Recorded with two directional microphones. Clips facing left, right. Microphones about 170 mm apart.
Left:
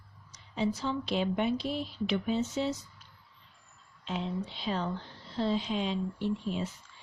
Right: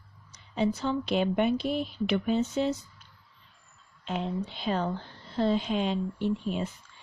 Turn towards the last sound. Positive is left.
turn(degrees=-55)  # may be behind; listen again after turning